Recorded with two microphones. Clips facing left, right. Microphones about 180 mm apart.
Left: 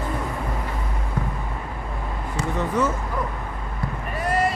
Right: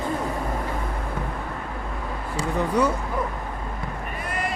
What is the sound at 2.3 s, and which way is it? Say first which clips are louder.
Speech: right 1 dB; 10° right (ahead or behind).